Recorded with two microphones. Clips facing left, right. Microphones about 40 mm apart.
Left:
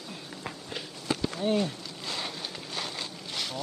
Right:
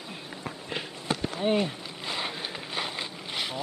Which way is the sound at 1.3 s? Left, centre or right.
Right.